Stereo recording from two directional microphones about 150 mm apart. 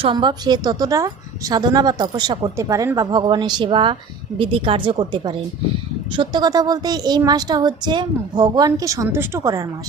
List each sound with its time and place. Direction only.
0.0 s a woman's voice: 35° right (ahead or behind)